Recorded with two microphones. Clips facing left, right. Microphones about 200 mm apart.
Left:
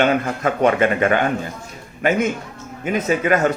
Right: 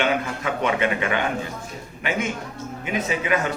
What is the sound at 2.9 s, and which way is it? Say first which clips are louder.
Speech: left 6 dB; 45° left (ahead or behind).